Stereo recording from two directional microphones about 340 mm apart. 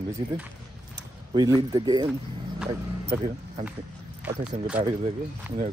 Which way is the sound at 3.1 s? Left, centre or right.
Centre.